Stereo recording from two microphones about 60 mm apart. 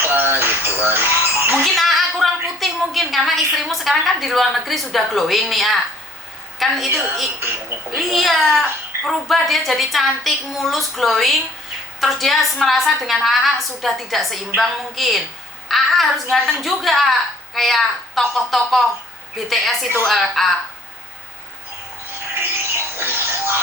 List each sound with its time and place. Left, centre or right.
0.1 s bird: right
1.6 s a woman's voice: centre
15.7 s a sound: centre
16.3 s a woman's voice: centre
23.0 s music: right